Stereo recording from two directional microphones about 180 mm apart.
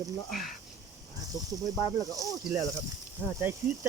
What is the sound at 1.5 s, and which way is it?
Speech, 20° right (ahead or behind).